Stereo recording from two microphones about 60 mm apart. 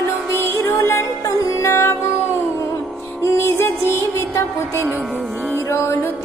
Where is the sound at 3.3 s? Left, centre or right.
Left.